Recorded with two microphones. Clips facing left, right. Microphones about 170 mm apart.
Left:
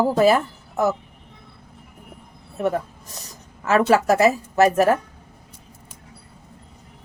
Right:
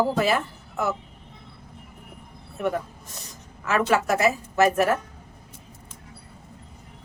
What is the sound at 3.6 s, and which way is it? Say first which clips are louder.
A woman's voice: left 5 dB; 35° left (ahead or behind).